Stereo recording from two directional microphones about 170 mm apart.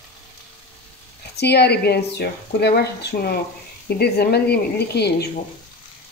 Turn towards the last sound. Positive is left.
turn(degrees=75)  # may be behind; listen again after turning